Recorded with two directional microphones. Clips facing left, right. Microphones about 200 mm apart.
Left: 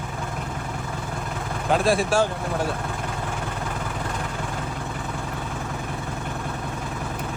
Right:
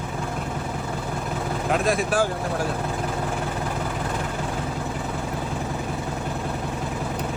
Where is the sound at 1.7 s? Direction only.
30° left (ahead or behind).